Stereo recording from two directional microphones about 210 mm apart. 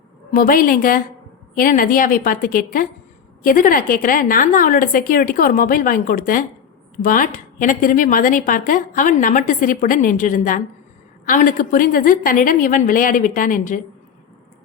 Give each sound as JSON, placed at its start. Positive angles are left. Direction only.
{"t": 0.3, "sound": "a woman's voice", "side_deg": 40}